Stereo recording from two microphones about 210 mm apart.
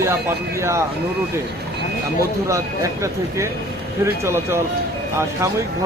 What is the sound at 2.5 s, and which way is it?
Speech, 15° right (ahead or behind).